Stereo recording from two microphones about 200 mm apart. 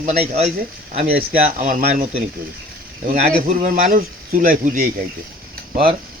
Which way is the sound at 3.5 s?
40° right (ahead or behind).